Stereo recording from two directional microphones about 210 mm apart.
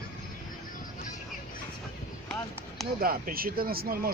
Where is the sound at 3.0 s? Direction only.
45° right (ahead or behind).